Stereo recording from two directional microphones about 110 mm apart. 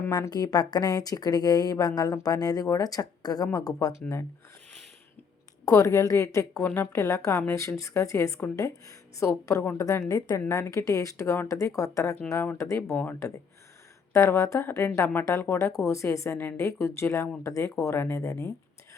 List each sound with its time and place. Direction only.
0.1 s a woman's voice: 40° left (ahead or behind)
5.6 s a woman's voice: 30° left (ahead or behind)